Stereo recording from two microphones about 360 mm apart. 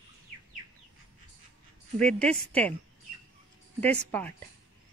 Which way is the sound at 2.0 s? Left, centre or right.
Centre.